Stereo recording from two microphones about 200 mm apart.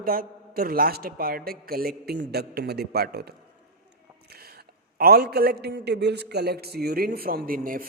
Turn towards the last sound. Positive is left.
turn(degrees=-45)  # may be behind; listen again after turning